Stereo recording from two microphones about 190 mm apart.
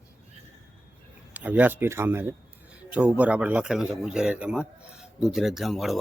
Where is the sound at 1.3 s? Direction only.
10° right (ahead or behind).